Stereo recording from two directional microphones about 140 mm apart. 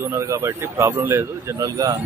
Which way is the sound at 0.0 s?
20° right (ahead or behind).